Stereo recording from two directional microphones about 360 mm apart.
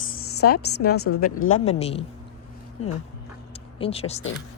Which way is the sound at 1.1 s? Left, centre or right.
Left.